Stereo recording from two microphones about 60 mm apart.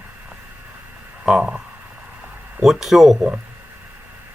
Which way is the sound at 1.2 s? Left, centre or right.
Centre.